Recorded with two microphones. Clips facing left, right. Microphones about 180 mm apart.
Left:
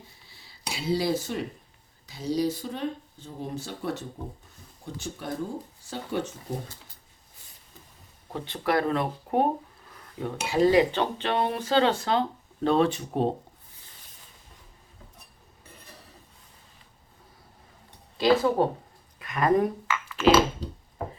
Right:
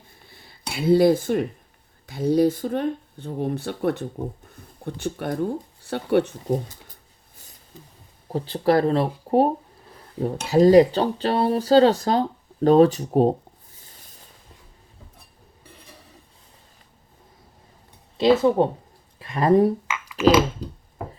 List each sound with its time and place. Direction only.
0.1 s a sound: 55° right (ahead or behind)
2.0 s speech: 55° right (ahead or behind)
8.3 s speech: 35° right (ahead or behind)
10.0 s dishes: 35° right (ahead or behind)
10.5 s speech: 40° right (ahead or behind)
18.2 s speech: 20° right (ahead or behind)
20.2 s a sound: 15° right (ahead or behind)